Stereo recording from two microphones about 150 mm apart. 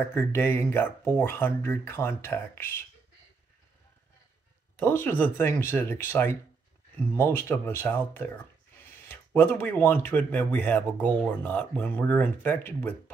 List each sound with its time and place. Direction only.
0.1 s speech: 15° left (ahead or behind)
4.7 s speech: 10° left (ahead or behind)